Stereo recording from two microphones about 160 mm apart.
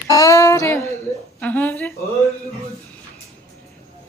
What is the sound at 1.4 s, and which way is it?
Speech, 10° left (ahead or behind).